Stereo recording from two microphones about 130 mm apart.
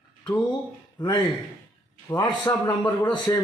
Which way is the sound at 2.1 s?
25° left (ahead or behind).